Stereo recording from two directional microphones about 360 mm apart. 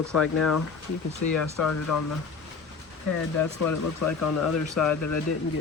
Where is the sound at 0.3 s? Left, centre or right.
Left.